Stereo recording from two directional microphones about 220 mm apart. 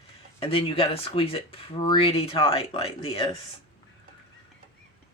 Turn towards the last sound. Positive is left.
turn(degrees=25)  # may be behind; listen again after turning